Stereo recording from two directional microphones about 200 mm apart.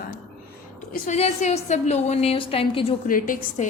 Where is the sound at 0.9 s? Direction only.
35° left (ahead or behind).